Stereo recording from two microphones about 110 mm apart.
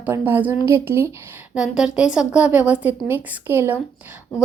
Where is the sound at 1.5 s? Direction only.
5° right (ahead or behind).